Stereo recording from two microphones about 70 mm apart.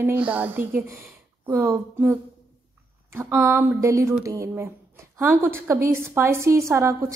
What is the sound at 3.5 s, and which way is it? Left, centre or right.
Speech, right.